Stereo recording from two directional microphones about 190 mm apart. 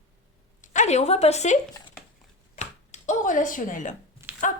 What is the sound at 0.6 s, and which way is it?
Speech, 40° left (ahead or behind).